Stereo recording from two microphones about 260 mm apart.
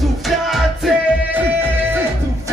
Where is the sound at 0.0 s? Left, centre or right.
Centre.